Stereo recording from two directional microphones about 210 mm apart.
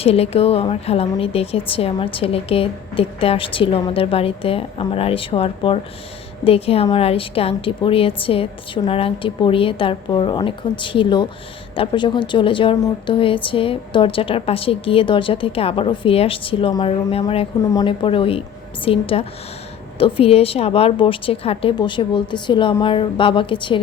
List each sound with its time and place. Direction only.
0.0 s speech: 30° left (ahead or behind)